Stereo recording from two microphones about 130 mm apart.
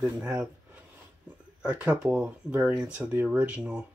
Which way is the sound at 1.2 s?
10° right (ahead or behind).